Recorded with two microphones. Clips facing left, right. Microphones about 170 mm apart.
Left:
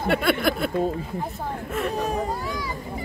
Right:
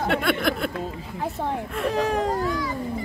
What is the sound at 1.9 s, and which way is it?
Speech, 90° right.